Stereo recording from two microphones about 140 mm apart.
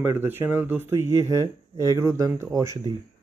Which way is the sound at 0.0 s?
15° right (ahead or behind).